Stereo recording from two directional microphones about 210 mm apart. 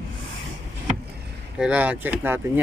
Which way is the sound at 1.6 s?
5° right (ahead or behind).